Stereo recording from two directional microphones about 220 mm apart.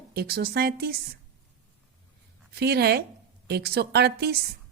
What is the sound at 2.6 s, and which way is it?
A woman's voice, 45° right (ahead or behind).